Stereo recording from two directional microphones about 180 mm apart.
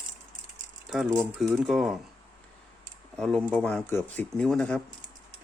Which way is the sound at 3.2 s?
5° left (ahead or behind).